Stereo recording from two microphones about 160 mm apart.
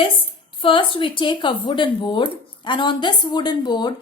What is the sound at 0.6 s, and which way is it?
A woman's voice, 30° left (ahead or behind).